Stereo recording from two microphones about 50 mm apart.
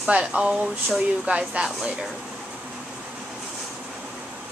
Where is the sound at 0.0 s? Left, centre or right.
Right.